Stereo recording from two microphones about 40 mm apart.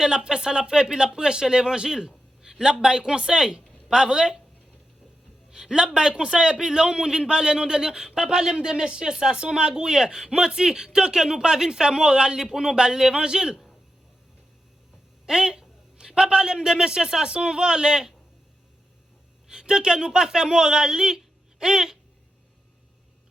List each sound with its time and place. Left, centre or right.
0.0 s a man's voice: centre
5.5 s a man's voice: centre
15.3 s a woman's voice: centre
19.5 s speech: centre